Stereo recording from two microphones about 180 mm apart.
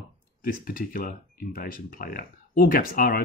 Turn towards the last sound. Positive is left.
turn(degrees=55)  # may be behind; listen again after turning